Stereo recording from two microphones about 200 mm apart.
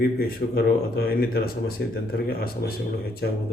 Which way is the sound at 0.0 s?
50° left (ahead or behind).